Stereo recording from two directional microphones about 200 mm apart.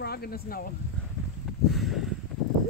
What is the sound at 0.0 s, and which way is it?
Speech, 50° left (ahead or behind).